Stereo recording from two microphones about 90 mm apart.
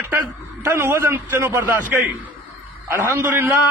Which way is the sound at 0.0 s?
30° right (ahead or behind).